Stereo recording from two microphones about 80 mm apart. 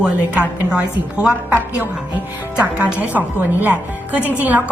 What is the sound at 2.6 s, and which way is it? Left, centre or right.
A woman's voice, centre.